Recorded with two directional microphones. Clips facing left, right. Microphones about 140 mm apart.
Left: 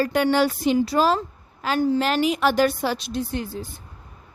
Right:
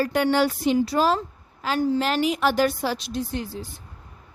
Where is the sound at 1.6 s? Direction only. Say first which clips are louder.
Left 2 dB; 60° left (ahead or behind).